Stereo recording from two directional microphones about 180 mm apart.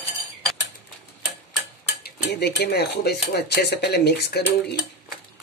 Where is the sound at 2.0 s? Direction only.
65° left (ahead or behind).